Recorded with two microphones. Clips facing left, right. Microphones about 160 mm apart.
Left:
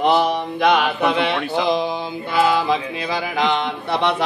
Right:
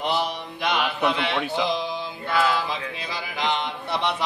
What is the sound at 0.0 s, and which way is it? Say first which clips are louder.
Mantra: left 9 dB; 60° left (ahead or behind).